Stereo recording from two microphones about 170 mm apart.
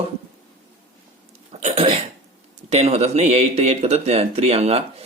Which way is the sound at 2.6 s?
40° right (ahead or behind).